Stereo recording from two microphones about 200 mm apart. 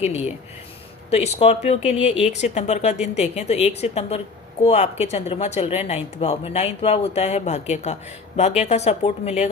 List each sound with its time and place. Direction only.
0.0 s speech: 35° left (ahead or behind)